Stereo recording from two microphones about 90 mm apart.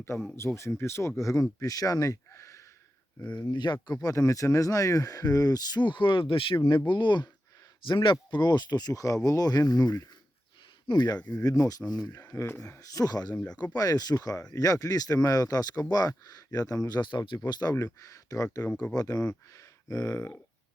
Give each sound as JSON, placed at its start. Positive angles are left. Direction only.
{"t": 0.3, "sound": "speech", "side_deg": 30}
{"t": 3.3, "sound": "speech", "side_deg": 55}
{"t": 6.7, "sound": "speech", "side_deg": 60}
{"t": 11.3, "sound": "speech", "side_deg": 40}
{"t": 12.2, "sound": "speech", "side_deg": 30}
{"t": 12.6, "sound": "speech", "side_deg": 40}
{"t": 13.3, "sound": "speech", "side_deg": 15}
{"t": 13.7, "sound": "speech", "side_deg": 45}